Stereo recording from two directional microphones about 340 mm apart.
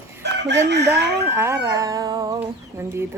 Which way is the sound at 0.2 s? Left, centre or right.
Right.